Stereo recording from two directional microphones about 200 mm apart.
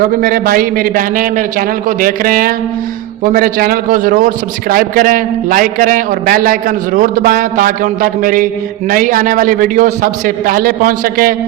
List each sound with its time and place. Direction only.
0.0 s a man's voice: 45° right (ahead or behind)